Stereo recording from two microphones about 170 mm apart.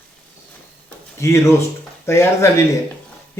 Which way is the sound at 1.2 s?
15° left (ahead or behind).